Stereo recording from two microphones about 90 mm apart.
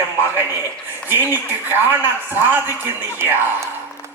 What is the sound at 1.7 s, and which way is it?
Speech, 25° right (ahead or behind).